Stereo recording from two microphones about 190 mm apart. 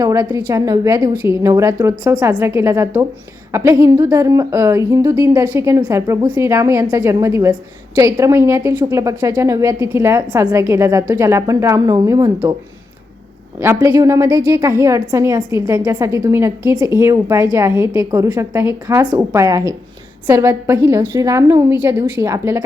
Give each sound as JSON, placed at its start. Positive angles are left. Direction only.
{"t": 0.0, "sound": "a woman's voice", "side_deg": -15}
{"t": 13.6, "sound": "a woman's voice", "side_deg": -15}